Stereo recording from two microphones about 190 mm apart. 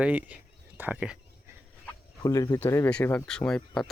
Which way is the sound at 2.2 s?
20° left (ahead or behind).